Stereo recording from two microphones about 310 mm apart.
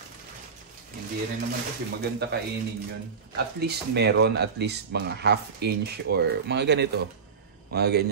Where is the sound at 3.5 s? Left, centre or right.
Right.